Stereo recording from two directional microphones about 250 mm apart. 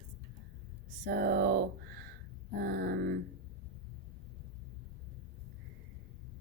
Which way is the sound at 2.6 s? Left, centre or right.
Right.